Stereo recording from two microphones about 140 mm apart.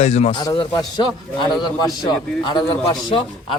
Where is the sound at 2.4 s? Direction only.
30° left (ahead or behind).